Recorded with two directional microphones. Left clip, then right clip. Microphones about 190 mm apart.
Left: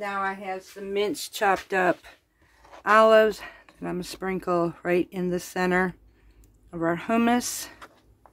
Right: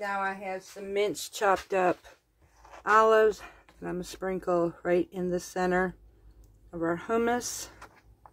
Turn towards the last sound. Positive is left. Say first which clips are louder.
# left 5 dB
turn(degrees=50)  # may be behind; listen again after turning